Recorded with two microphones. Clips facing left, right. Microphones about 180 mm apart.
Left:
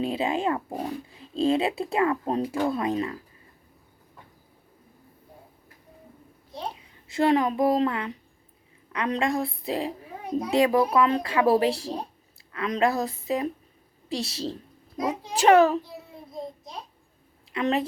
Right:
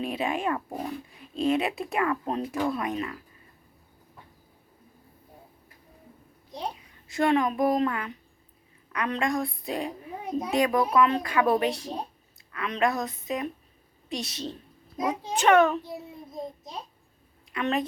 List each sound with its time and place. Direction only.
0.0 s speech: 25° left (ahead or behind)
6.8 s speech: 25° left (ahead or behind)
17.5 s a woman's voice: 25° left (ahead or behind)